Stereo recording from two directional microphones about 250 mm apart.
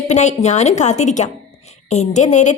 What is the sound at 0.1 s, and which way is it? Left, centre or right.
A woman's voice, left.